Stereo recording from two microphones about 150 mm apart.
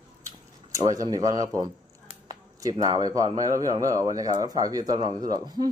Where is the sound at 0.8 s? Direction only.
20° right (ahead or behind).